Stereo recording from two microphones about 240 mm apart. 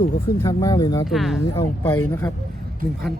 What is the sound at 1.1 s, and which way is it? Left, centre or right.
Speech, centre.